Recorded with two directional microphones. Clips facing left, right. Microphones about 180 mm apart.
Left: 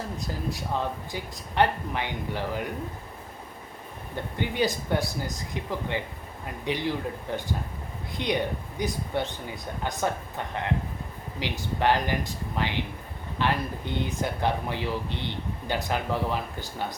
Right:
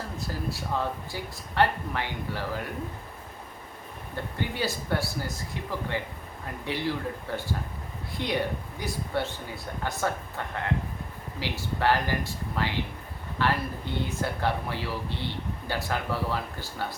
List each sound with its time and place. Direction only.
0.2 s speech: 15° left (ahead or behind)
4.1 s speech: 20° left (ahead or behind)
6.7 s speech: 20° left (ahead or behind)